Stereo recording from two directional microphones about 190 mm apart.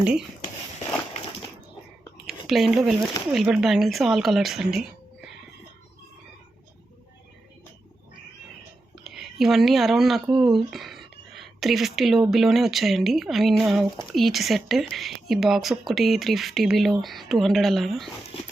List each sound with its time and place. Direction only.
0.0 s speech: 5° right (ahead or behind)
2.5 s speech: centre (ahead or behind)
9.0 s speech: centre (ahead or behind)